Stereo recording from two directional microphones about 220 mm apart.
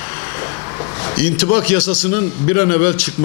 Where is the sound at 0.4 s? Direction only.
20° left (ahead or behind).